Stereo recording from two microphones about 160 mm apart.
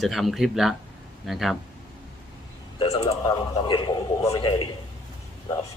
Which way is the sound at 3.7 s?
30° left (ahead or behind).